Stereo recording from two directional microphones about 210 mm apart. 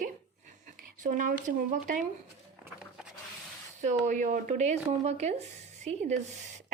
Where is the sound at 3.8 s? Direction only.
35° right (ahead or behind).